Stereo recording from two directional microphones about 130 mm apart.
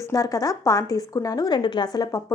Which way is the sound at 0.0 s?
25° left (ahead or behind).